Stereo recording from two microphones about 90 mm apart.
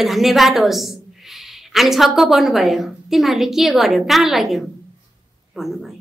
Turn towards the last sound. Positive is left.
turn(degrees=0)  # may be behind; listen again after turning